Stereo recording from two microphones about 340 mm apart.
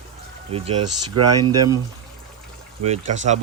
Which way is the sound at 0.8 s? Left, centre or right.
Right.